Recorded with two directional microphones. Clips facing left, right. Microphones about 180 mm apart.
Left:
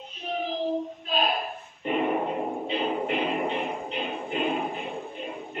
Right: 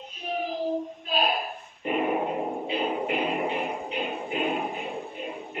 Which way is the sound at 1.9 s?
5° right (ahead or behind).